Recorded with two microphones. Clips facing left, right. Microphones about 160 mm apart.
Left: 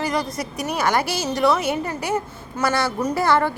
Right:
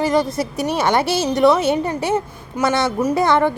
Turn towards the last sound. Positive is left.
turn(degrees=-20)  # may be behind; listen again after turning